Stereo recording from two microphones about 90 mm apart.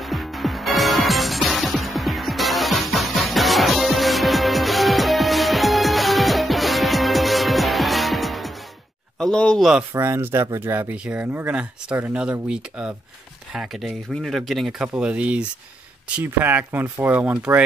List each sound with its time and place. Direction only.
0.0 s music: centre (ahead or behind)
9.2 s speech: 10° left (ahead or behind)
9.6 s speech: 5° right (ahead or behind)
9.9 s speech: 25° right (ahead or behind)
10.9 s speech: 15° right (ahead or behind)
14.9 s speech: 15° right (ahead or behind)